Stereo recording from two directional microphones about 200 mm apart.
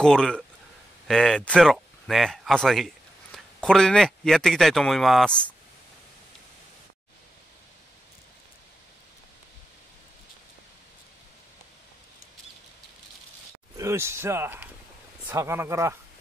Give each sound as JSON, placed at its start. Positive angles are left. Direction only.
{"t": 0.0, "sound": "speech", "side_deg": 5}
{"t": 13.7, "sound": "speech", "side_deg": -15}